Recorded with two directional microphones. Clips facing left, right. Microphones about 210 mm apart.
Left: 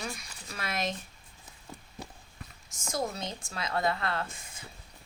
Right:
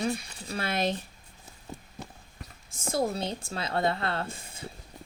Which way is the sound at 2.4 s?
35° right (ahead or behind).